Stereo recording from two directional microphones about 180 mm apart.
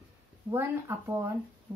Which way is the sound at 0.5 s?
15° right (ahead or behind).